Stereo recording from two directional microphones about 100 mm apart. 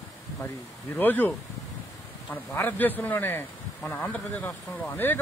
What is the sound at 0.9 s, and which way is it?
Speech, 20° left (ahead or behind).